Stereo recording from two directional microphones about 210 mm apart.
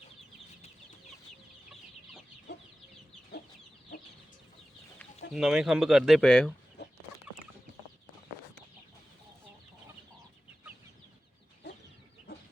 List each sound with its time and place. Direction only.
3.3 s chicken: 50° left (ahead or behind)
5.3 s speech: centre (ahead or behind)
6.8 s chicken: 50° left (ahead or behind)